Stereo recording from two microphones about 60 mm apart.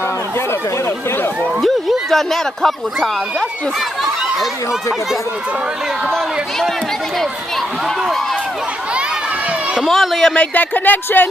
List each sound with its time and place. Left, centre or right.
1.6 s speech: centre
9.8 s speech: centre
10.3 s speech: left